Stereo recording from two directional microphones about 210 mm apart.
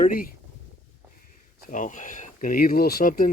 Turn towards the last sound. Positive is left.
turn(degrees=40)  # may be behind; listen again after turning